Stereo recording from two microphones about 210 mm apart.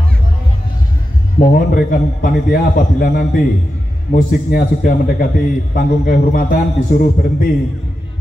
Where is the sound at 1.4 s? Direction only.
40° left (ahead or behind).